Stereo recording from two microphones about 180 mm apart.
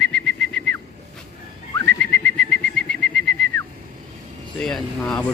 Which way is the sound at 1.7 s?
10° left (ahead or behind).